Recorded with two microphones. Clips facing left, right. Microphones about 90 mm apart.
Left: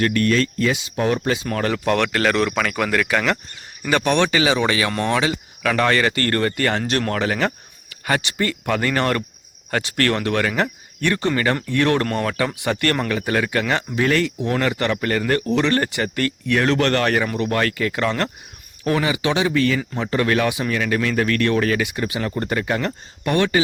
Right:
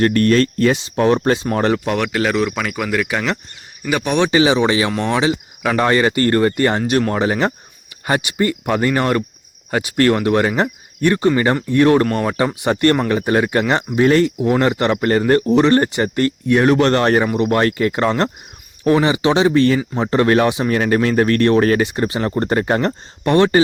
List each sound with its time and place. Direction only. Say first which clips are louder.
0.0 s speech: right 5 dB; 40° right (ahead or behind)
1.9 s speech: even; 15° right (ahead or behind)
4.3 s speech: right 5 dB; 25° right (ahead or behind)
4.9 s speech: right 3 dB; 10° right (ahead or behind); by 14.3 s 25° right (ahead or behind)
14.3 s speech: right 5 dB; 15° right (ahead or behind)
15.4 s speech: right 6 dB; 20° right (ahead or behind)